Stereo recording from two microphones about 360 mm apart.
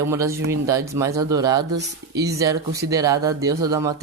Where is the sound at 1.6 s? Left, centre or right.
Right.